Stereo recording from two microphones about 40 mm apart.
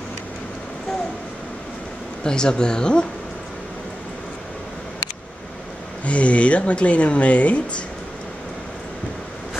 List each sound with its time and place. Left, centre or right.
2.2 s speech: left
6.0 s speech: left